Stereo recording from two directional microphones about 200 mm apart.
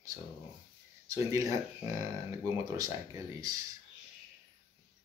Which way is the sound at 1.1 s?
15° right (ahead or behind).